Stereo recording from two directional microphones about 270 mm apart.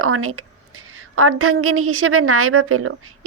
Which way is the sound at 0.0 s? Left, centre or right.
Right.